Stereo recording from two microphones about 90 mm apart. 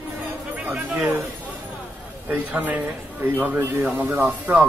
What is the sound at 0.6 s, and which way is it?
Speech, 15° right (ahead or behind).